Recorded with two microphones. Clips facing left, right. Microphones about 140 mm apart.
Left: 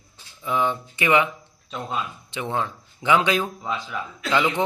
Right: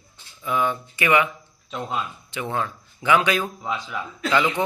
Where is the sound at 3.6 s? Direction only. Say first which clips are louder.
Even; centre (ahead or behind).